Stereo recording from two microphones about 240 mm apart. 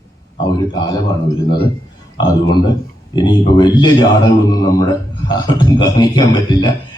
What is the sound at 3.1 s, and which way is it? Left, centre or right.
A man's voice, centre.